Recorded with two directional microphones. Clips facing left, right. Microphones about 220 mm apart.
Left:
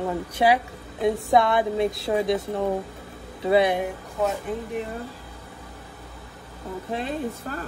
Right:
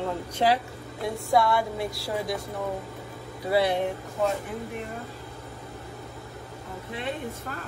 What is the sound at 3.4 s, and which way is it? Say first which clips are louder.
Speech: left 4 dB; 20° left (ahead or behind).